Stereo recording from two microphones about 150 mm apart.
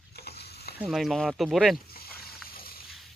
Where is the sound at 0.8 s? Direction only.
Centre (ahead or behind).